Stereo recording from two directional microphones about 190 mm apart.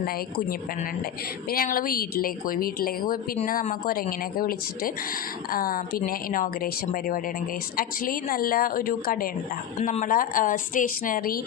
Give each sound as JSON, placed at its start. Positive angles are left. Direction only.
{"t": 1.5, "sound": "a woman's voice", "side_deg": 50}